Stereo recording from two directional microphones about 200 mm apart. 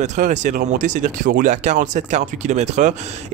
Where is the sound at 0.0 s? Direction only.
35° right (ahead or behind).